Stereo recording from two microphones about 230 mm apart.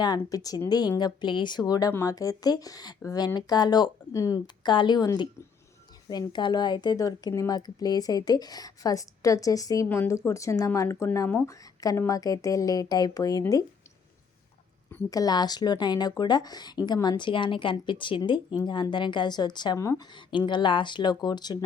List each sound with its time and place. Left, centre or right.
0.0 s speech: centre
14.8 s a woman's voice: centre